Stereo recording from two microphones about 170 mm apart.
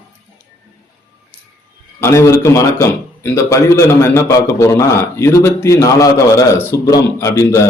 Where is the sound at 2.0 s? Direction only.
15° left (ahead or behind).